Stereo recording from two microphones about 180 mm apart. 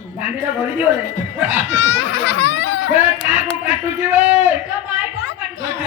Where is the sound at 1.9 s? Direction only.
90° left.